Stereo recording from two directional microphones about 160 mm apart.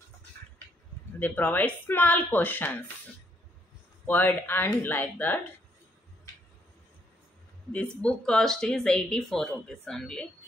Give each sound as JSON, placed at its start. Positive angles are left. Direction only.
{"t": 1.2, "sound": "speech", "side_deg": 10}
{"t": 4.0, "sound": "speech", "side_deg": 10}
{"t": 7.7, "sound": "speech", "side_deg": 5}